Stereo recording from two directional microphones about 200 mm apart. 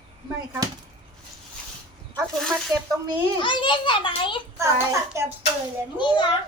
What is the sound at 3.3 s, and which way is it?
A child's voice, 25° left (ahead or behind).